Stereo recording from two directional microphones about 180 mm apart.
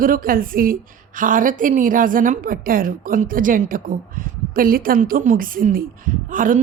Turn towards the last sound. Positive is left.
turn(degrees=-50)  # may be behind; listen again after turning